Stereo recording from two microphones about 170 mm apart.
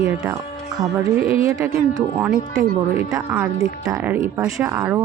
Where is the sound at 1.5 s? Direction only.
15° right (ahead or behind).